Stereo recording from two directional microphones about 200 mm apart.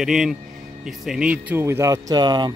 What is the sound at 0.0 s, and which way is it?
Speech, centre (ahead or behind).